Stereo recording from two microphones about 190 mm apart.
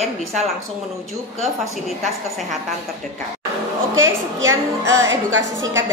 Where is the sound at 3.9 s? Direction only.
90° right.